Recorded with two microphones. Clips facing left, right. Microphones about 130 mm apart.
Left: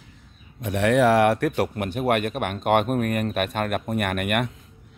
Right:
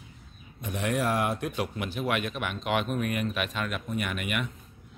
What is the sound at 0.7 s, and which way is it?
A man's voice, 75° left (ahead or behind).